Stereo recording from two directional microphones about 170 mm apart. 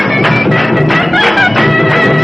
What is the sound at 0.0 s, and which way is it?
Music, centre (ahead or behind).